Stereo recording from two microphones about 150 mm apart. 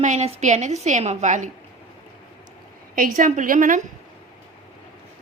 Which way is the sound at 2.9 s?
65° right (ahead or behind).